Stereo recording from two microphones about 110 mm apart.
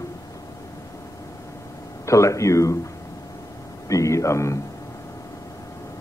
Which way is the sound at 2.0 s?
25° left (ahead or behind).